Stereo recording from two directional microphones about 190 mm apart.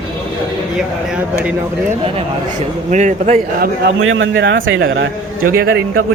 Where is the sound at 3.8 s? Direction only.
85° right.